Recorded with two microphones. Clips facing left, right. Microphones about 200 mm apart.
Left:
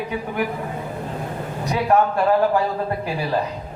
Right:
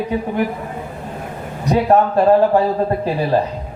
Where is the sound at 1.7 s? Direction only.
35° right (ahead or behind).